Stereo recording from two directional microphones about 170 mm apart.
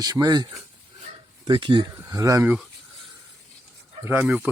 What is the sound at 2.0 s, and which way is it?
Speech, 20° right (ahead or behind).